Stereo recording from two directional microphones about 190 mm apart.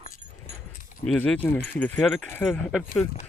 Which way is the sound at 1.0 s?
5° left (ahead or behind).